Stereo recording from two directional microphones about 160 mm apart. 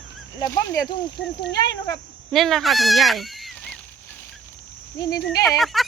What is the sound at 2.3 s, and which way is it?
Speech, 5° left (ahead or behind).